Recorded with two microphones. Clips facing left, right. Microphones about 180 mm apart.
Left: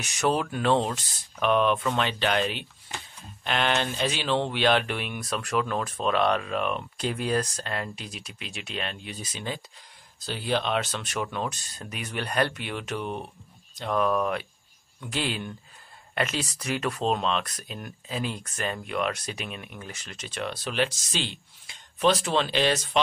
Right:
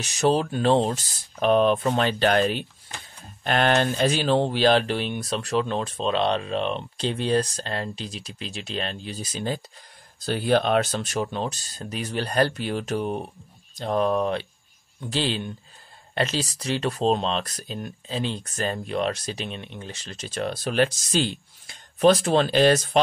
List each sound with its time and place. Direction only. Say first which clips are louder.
0.0 s speech: right 4 dB; 35° right (ahead or behind)
10.2 s speech: right 6 dB; 50° right (ahead or behind)